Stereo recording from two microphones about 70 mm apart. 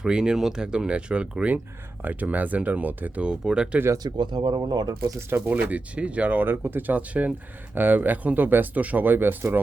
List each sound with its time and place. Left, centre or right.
0.0 s speech: centre
3.9 s speech: right
5.5 s speech: centre